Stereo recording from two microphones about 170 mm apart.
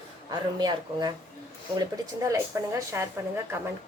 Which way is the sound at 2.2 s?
15° right (ahead or behind).